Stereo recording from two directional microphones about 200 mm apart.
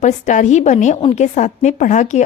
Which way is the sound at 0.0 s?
35° left (ahead or behind).